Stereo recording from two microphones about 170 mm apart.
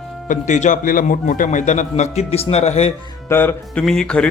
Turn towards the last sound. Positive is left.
turn(degrees=5)  # may be behind; listen again after turning